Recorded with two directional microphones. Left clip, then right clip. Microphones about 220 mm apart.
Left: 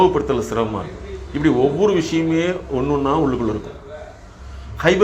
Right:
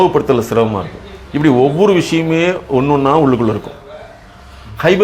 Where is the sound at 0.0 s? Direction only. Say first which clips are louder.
Right 4 dB; 50° right (ahead or behind).